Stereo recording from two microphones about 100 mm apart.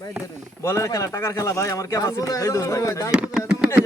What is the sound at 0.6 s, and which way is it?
Speech, 35° left (ahead or behind).